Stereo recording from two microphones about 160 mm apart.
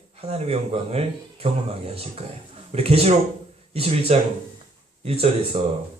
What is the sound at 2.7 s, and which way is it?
Speech, 40° right (ahead or behind).